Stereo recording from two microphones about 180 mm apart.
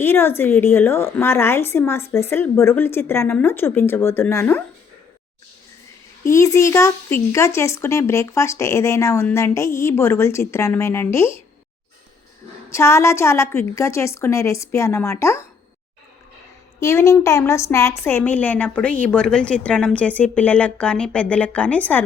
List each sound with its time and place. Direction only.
0.0 s speech: 10° left (ahead or behind)
6.2 s speech: 15° left (ahead or behind)
12.7 s speech: 15° left (ahead or behind)
16.8 s speech: 15° left (ahead or behind)